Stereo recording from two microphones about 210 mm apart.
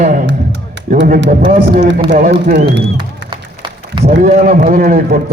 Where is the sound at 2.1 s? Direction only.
40° right (ahead or behind).